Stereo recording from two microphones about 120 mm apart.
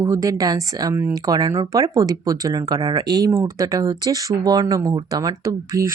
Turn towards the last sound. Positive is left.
turn(degrees=-30)  # may be behind; listen again after turning